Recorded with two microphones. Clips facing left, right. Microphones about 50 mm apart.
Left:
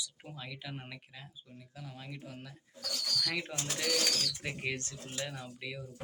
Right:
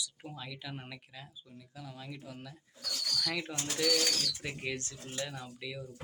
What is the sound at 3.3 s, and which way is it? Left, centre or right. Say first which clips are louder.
Speech: even; left.